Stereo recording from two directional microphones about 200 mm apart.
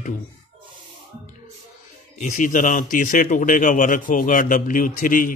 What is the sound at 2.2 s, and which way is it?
Speech, 40° left (ahead or behind).